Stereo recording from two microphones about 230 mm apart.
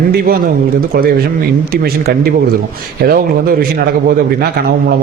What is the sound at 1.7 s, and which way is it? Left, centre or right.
A man's voice, right.